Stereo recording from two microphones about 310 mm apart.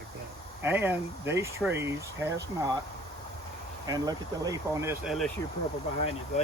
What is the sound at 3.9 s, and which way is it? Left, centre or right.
Speech, centre.